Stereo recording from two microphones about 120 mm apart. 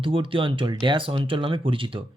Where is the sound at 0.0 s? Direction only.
45° right (ahead or behind).